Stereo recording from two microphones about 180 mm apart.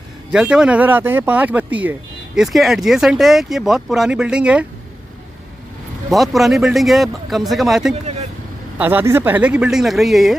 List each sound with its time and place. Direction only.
0.3 s speech: 5° right (ahead or behind)
6.0 s speech: centre (ahead or behind)
7.9 s speech: 35° right (ahead or behind)
8.7 s speech: 10° right (ahead or behind)